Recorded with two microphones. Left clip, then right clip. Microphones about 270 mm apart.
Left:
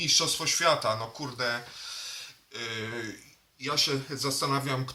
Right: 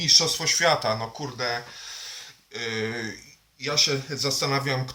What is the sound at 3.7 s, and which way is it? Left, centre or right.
Speech, centre.